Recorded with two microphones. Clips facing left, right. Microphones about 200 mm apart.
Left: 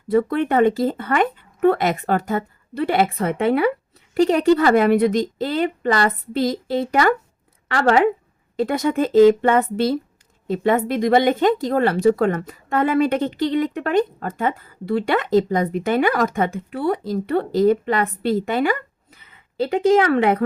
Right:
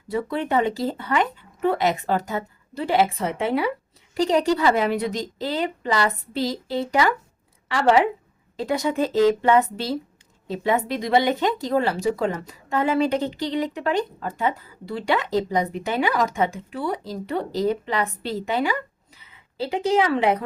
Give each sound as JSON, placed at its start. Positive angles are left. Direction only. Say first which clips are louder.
{"t": 0.1, "sound": "speech", "louder": "left 6 dB", "side_deg": 55}